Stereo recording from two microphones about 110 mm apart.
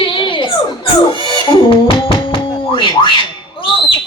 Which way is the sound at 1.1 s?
45° left (ahead or behind).